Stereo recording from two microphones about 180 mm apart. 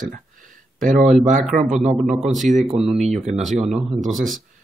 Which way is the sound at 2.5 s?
40° right (ahead or behind).